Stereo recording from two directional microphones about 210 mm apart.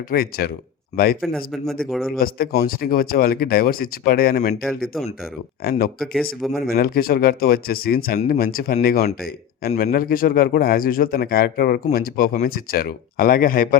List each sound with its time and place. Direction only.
0.1 s speech: 45° left (ahead or behind)
1.2 s a man's voice: 5° left (ahead or behind)
2.0 s speech: 45° left (ahead or behind)
4.6 s a man's voice: centre (ahead or behind)
5.6 s speech: 45° left (ahead or behind)